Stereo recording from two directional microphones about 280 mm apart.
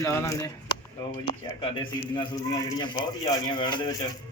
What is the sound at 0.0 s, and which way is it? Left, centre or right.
Speech, centre.